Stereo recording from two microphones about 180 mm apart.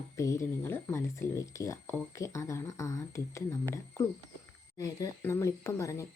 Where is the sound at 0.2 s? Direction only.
15° left (ahead or behind).